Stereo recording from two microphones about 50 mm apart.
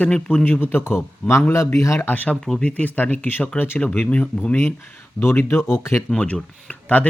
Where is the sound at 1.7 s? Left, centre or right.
Left.